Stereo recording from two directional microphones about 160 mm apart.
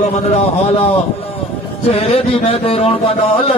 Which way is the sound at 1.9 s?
40° left (ahead or behind).